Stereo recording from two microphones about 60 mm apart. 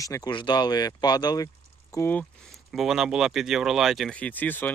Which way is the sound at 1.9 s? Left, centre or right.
Left.